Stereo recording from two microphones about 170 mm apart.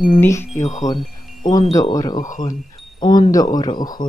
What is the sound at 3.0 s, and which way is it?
Speech, 25° left (ahead or behind).